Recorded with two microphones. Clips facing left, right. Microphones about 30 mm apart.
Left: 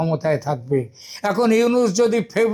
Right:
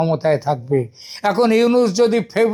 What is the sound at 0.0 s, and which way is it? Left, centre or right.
Speech, right.